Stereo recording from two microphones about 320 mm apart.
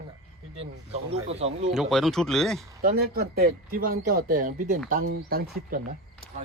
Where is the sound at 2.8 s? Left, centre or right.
Right.